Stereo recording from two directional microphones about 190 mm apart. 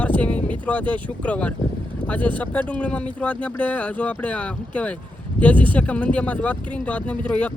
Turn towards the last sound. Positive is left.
turn(degrees=5)  # may be behind; listen again after turning